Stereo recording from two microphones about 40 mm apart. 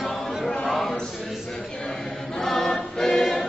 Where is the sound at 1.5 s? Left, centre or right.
Centre.